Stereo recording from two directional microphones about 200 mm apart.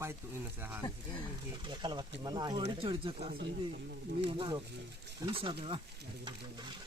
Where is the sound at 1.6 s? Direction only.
20° right (ahead or behind).